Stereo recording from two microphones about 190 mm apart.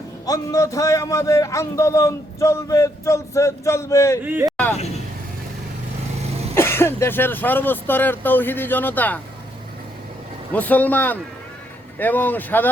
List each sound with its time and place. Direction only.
0.3 s a man's voice: 15° left (ahead or behind)
4.2 s speech: 10° right (ahead or behind)
6.5 s a man's voice: 15° left (ahead or behind)
10.5 s a man's voice: 10° left (ahead or behind)